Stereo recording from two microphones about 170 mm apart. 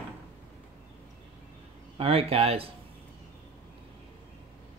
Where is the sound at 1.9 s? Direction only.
35° right (ahead or behind).